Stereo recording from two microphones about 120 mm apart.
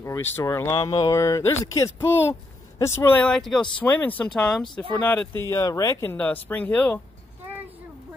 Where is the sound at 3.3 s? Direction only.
5° left (ahead or behind).